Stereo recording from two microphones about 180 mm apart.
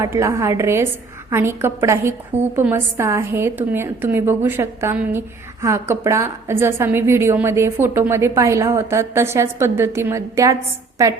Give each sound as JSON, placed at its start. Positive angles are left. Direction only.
{"t": 0.0, "sound": "a woman's voice", "side_deg": -15}